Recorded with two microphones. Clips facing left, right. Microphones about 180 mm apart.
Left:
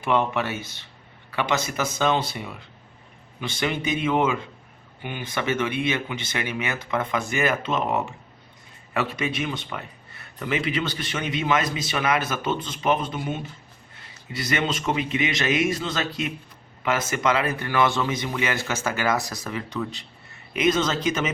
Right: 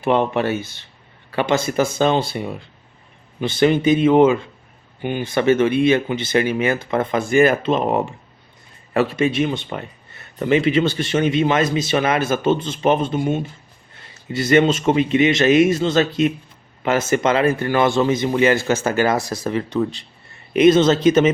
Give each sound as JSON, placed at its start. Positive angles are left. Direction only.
{"t": 0.0, "sound": "speech", "side_deg": -30}
{"t": 10.2, "sound": "a sound", "side_deg": -30}
{"t": 10.7, "sound": "speech", "side_deg": -25}
{"t": 13.1, "sound": "speech", "side_deg": -40}
{"t": 14.3, "sound": "speech", "side_deg": -25}